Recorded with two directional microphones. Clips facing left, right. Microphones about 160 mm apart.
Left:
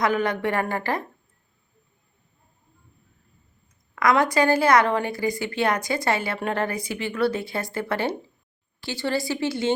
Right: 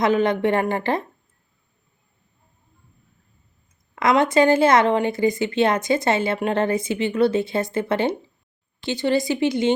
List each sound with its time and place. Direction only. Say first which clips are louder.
0.0 s a woman's voice: right 4 dB; 20° right (ahead or behind)
3.9 s a woman's voice: right 3 dB; 25° right (ahead or behind)